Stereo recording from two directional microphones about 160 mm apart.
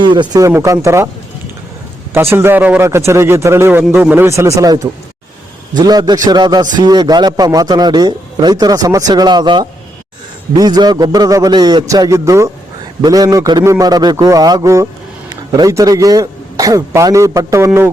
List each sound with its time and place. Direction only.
0.0 s a man's voice: 30° right (ahead or behind)
2.1 s a man's voice: 15° right (ahead or behind)